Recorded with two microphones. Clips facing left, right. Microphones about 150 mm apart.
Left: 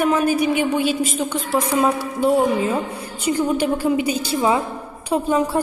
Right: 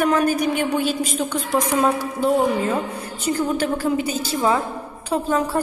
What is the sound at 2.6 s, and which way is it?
A woman's voice, 10° left (ahead or behind).